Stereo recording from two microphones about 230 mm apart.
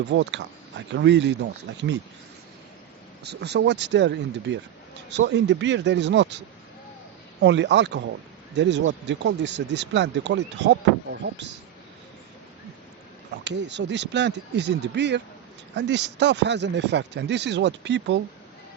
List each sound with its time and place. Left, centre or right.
0.1 s speech: right
3.2 s speech: right
7.4 s speech: right
13.4 s speech: right